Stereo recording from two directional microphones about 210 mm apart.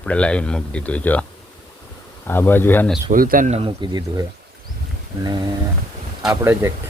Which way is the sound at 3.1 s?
40° right (ahead or behind).